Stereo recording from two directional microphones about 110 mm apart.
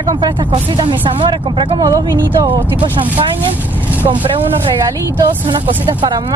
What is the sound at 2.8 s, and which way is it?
Speech, 50° right (ahead or behind).